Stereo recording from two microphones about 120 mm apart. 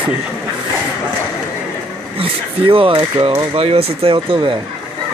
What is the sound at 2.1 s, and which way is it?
Speech, 50° right (ahead or behind).